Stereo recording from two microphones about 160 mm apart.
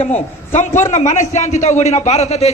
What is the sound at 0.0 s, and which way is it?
A man's voice, 45° left (ahead or behind).